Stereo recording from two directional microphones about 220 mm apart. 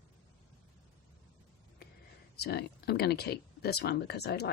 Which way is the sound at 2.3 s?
45° left (ahead or behind).